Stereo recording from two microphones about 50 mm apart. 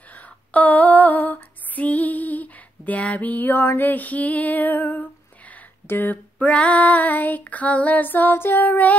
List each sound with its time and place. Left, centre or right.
0.1 s female singing: left
5.9 s speech: left
6.3 s female singing: left